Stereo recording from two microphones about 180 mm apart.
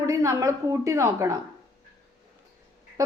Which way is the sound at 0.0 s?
15° right (ahead or behind).